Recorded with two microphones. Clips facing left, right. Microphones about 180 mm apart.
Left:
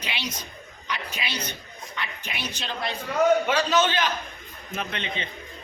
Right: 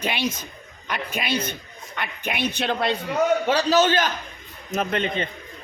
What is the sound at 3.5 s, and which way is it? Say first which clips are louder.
A man's voice: right 4 dB; 35° right (ahead or behind).